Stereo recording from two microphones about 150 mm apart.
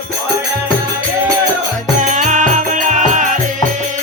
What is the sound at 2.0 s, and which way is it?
Music, 55° right (ahead or behind).